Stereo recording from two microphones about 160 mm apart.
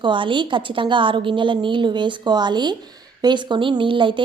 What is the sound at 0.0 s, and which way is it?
A woman's voice, 30° right (ahead or behind).